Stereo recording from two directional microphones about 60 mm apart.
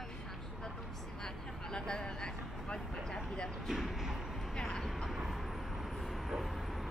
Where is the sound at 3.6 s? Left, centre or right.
Centre.